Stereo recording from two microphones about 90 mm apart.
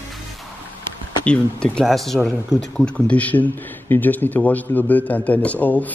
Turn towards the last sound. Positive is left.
turn(degrees=15)  # may be behind; listen again after turning